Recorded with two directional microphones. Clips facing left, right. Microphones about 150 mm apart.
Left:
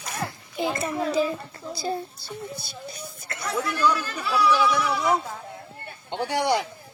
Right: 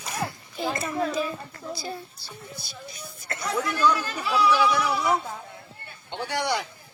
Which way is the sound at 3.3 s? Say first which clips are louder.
Even; 15° right (ahead or behind).